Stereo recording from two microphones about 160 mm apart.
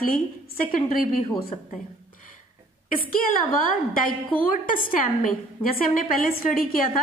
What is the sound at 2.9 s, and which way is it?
A woman's voice, 60° left (ahead or behind).